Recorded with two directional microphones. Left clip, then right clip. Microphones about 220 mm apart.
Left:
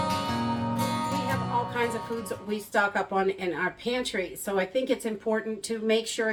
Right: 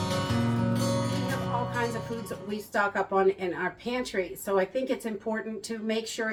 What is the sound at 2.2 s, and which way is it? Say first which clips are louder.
A woman's voice: left 3 dB; 20° left (ahead or behind).